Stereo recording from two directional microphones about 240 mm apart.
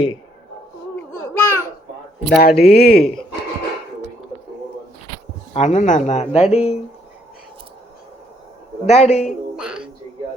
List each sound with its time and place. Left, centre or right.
1.3 s babbling: centre
2.4 s speech: left
5.5 s speech: left
8.9 s speech: left
9.2 s a sound: centre